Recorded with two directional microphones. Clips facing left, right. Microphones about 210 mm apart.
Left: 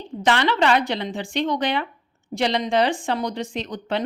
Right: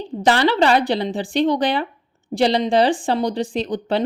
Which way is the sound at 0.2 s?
35° right (ahead or behind).